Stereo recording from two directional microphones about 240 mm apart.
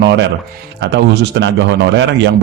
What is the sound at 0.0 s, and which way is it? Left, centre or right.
A man's voice, right.